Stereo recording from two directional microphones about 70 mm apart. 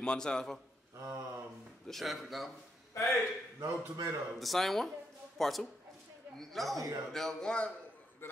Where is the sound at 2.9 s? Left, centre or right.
Left.